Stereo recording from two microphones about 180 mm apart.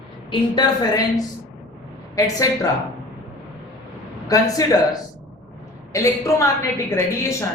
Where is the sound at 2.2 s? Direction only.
20° left (ahead or behind).